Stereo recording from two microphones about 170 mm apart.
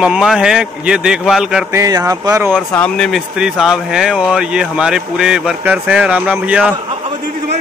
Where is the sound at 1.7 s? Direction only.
15° right (ahead or behind).